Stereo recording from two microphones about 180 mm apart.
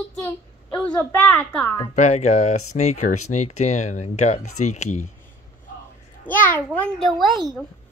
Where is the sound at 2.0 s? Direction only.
40° left (ahead or behind).